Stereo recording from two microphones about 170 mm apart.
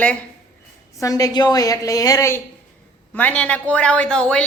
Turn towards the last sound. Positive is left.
turn(degrees=5)  # may be behind; listen again after turning